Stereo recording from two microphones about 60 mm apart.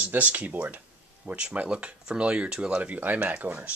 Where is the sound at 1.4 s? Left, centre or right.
Centre.